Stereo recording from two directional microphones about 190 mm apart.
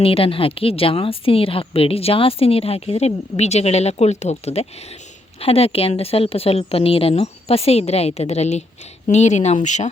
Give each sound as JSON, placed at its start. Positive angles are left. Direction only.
{"t": 0.0, "sound": "a woman's voice", "side_deg": 30}